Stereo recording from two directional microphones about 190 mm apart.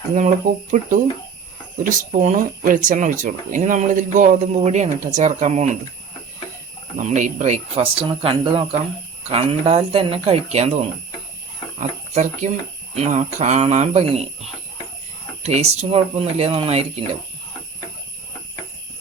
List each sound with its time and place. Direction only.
0.1 s speech: 40° right (ahead or behind)
6.9 s speech: 40° right (ahead or behind)
15.4 s speech: 35° right (ahead or behind)